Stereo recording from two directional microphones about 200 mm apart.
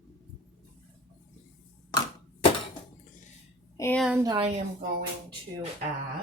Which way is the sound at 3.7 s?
10° left (ahead or behind).